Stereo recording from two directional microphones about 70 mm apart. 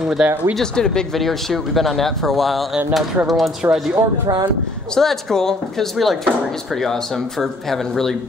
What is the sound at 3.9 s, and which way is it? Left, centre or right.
Speech, right.